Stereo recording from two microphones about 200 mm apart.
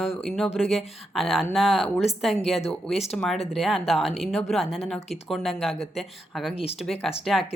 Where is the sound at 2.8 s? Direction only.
5° left (ahead or behind).